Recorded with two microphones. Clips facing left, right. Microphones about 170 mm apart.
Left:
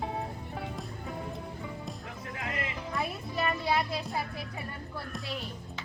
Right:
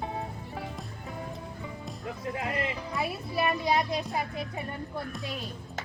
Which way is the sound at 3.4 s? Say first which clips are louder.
Right 3 dB; 15° right (ahead or behind).